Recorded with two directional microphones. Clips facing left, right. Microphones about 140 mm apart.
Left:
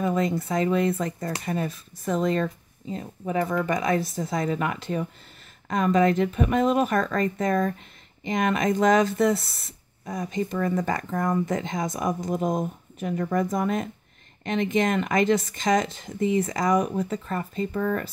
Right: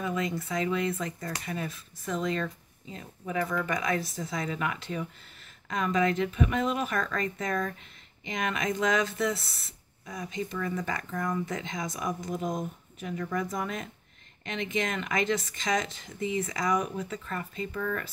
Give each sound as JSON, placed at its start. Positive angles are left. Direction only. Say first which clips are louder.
{"t": 0.0, "sound": "speech", "louder": "left 7 dB", "side_deg": 40}